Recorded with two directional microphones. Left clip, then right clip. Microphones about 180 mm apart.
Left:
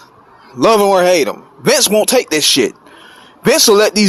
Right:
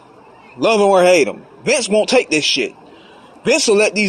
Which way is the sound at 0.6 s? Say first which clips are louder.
Left 2 dB; 45° left (ahead or behind).